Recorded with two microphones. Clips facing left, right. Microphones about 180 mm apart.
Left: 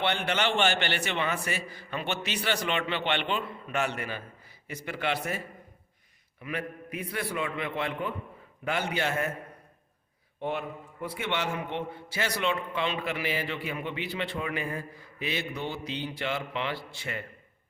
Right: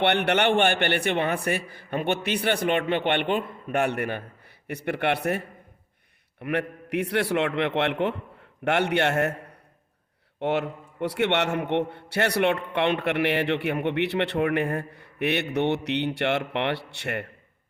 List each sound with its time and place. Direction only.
0.0 s a man's voice: 65° right (ahead or behind)
10.4 s a man's voice: 80° right